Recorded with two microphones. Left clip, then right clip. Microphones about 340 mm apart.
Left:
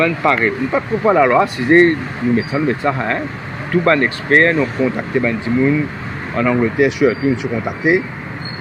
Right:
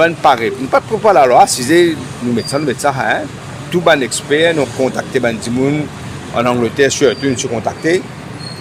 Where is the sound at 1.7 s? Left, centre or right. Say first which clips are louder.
Even; right.